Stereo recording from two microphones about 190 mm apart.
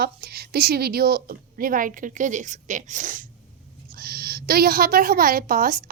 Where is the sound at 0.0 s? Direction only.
55° right (ahead or behind).